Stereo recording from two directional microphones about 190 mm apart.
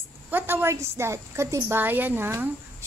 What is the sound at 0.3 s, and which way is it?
A woman's voice, 10° right (ahead or behind).